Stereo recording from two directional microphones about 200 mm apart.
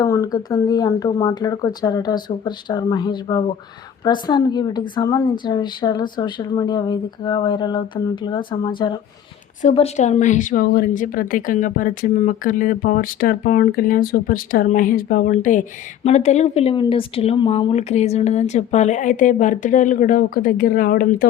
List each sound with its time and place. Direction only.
0.0 s a woman's voice: 15° left (ahead or behind)
9.6 s speech: 35° left (ahead or behind)